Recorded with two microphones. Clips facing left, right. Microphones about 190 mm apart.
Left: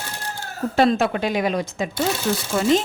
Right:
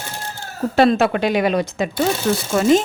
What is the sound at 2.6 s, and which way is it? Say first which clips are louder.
Speech: right 4 dB; 45° right (ahead or behind).